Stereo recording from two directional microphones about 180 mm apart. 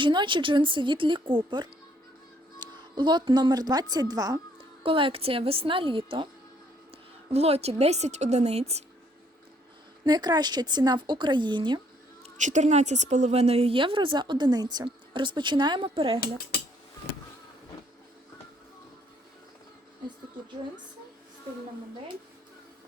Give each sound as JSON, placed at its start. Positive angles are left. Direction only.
{"t": 0.0, "sound": "a woman's voice", "side_deg": -25}
{"t": 7.3, "sound": "a woman's voice", "side_deg": -35}
{"t": 10.0, "sound": "a woman's voice", "side_deg": -25}
{"t": 12.2, "sound": "a woman's voice", "side_deg": -40}